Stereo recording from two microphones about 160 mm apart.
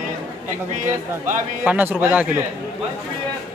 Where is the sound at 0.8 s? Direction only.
55° right (ahead or behind).